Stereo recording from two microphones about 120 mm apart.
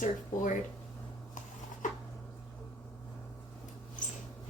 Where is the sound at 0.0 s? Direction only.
90° left.